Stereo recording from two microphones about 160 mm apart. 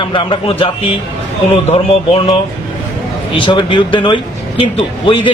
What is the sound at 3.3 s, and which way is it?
Speech, 30° left (ahead or behind).